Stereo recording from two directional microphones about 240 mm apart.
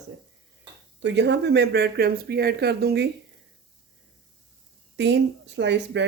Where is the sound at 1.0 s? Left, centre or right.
Right.